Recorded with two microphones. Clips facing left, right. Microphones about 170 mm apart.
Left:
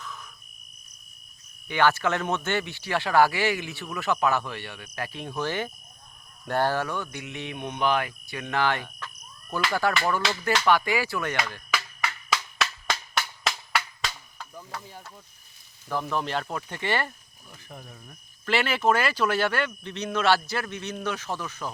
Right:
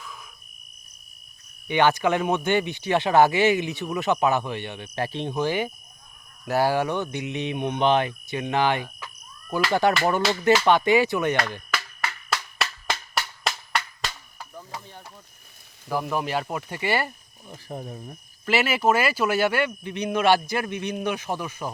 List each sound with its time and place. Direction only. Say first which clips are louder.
0.0 s cricket: left 1 dB; 10° right (ahead or behind)
1.6 s speech: right 3 dB; 20° right (ahead or behind)
12.0 s music: even; centre (ahead or behind)
15.9 s speech: right 2 dB; 10° right (ahead or behind)
17.5 s speech: right 9 dB; 35° right (ahead or behind)
18.4 s speech: right 2 dB; 10° right (ahead or behind)